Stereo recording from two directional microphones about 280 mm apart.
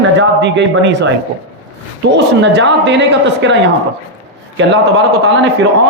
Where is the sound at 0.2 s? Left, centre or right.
Right.